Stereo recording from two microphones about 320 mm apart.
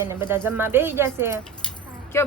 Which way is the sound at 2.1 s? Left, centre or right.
Centre.